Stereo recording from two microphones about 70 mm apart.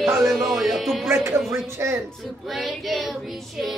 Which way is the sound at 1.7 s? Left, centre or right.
Right.